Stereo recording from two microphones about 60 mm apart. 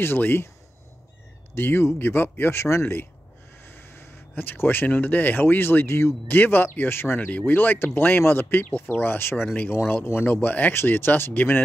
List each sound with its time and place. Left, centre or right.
0.0 s speech: left
1.5 s speech: left
6.2 s speech: left
7.2 s speech: left